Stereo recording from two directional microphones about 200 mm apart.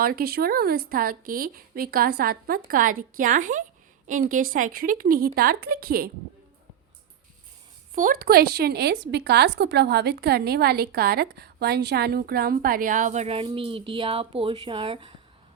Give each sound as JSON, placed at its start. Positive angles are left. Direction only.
{"t": 0.0, "sound": "a woman's voice", "side_deg": -50}
{"t": 7.9, "sound": "speech", "side_deg": -45}